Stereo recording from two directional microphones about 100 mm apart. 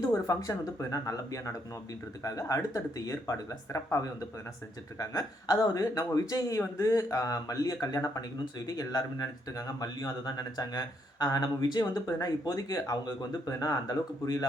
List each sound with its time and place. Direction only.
0.3 s speech: 35° left (ahead or behind)